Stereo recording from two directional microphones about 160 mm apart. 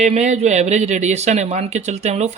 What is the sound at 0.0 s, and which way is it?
Speech, 45° right (ahead or behind).